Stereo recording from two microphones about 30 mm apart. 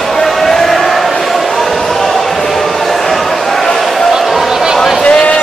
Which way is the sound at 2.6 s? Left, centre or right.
Centre.